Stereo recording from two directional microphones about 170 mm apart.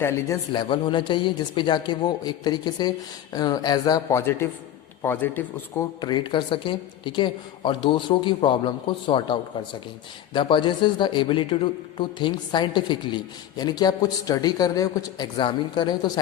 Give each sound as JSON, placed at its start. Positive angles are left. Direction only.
{"t": 0.5, "sound": "a man's voice", "side_deg": 30}